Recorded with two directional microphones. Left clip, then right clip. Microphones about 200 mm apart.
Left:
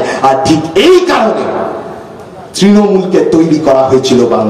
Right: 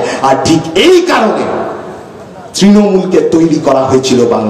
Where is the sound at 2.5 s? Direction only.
30° right (ahead or behind).